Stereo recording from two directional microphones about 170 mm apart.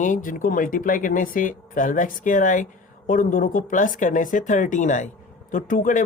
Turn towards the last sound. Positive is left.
turn(degrees=50)  # may be behind; listen again after turning